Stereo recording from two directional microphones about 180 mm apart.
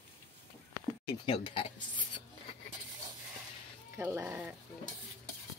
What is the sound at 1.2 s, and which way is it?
Speech, 30° left (ahead or behind).